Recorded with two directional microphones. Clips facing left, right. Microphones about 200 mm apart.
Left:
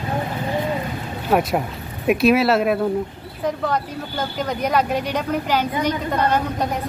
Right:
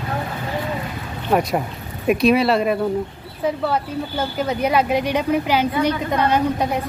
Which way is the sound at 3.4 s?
10° right (ahead or behind).